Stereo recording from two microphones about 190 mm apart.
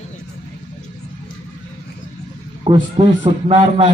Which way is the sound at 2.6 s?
25° right (ahead or behind).